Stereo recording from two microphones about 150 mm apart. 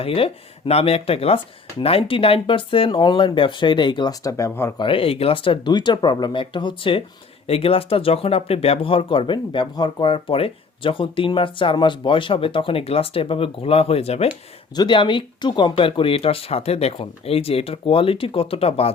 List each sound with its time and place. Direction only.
0.0 s speech: 40° left (ahead or behind); by 4.7 s 20° left (ahead or behind)
4.8 s speech: 35° left (ahead or behind)
14.8 s speech: 30° left (ahead or behind)